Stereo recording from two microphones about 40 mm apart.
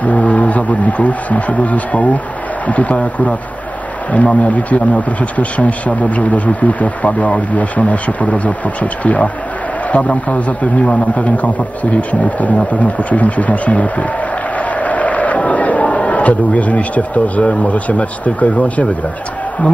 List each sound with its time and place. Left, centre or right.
0.0 s a man's voice: left